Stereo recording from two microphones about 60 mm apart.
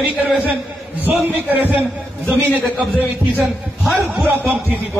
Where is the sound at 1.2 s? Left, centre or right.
Right.